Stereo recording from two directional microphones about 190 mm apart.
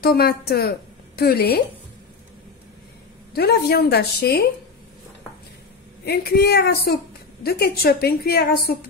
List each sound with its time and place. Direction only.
0.0 s a woman's voice: 55° left (ahead or behind)
3.3 s a woman's voice: 55° left (ahead or behind)
6.0 s a woman's voice: 55° left (ahead or behind)